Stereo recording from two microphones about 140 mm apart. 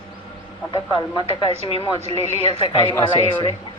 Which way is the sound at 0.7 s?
30° left (ahead or behind).